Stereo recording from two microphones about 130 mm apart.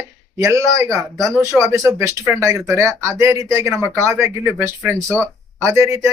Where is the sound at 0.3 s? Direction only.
20° right (ahead or behind).